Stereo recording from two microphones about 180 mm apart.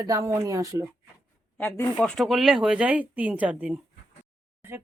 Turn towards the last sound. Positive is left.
turn(degrees=-5)  # may be behind; listen again after turning